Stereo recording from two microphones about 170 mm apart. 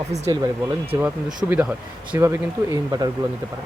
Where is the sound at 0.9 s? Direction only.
20° right (ahead or behind).